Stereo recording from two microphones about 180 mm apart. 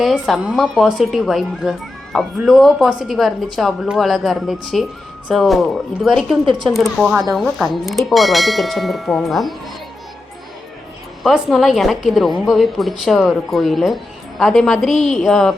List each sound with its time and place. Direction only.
0.0 s speech: centre (ahead or behind)
6.4 s a woman's voice: 25° right (ahead or behind)
6.7 s speech: centre (ahead or behind)
11.2 s speech: centre (ahead or behind)